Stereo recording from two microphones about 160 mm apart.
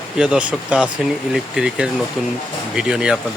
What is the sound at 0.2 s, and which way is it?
Speech, 5° right (ahead or behind).